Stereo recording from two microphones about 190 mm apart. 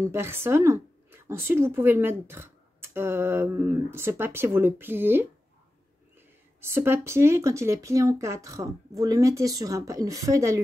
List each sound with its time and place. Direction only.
0.0 s speech: 15° right (ahead or behind)
6.6 s speech: 10° right (ahead or behind)